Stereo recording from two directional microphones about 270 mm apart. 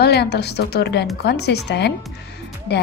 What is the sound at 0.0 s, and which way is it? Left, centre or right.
A woman's voice, left.